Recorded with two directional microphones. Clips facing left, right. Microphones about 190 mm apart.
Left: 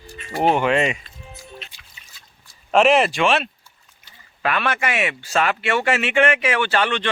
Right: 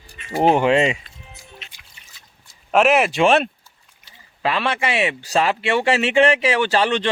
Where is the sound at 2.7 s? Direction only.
10° right (ahead or behind).